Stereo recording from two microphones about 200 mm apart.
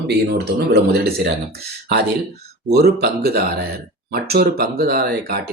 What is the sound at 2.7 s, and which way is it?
Speech, 55° right (ahead or behind).